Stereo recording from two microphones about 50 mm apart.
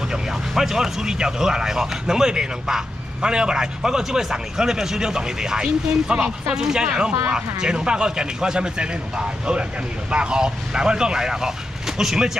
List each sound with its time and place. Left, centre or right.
0.1 s a man's voice: centre